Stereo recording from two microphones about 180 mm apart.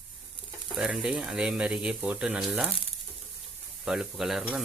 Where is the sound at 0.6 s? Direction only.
Centre (ahead or behind).